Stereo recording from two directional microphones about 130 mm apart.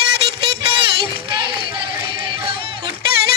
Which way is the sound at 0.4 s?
40° right (ahead or behind).